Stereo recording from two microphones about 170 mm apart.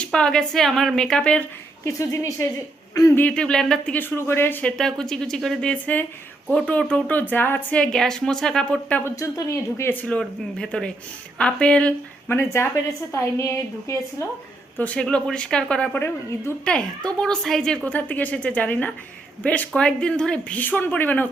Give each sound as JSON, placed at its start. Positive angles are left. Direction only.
{"t": 0.0, "sound": "speech", "side_deg": 5}
{"t": 3.2, "sound": "speech", "side_deg": 5}
{"t": 9.1, "sound": "speech", "side_deg": 15}